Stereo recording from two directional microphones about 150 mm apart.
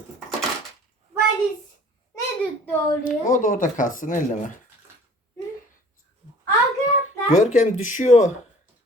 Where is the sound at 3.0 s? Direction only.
60° left (ahead or behind).